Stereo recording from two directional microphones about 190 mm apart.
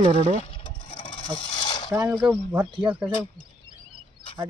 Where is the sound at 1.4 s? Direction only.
25° left (ahead or behind).